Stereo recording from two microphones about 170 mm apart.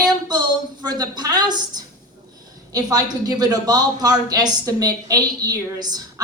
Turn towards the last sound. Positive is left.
turn(degrees=-25)  # may be behind; listen again after turning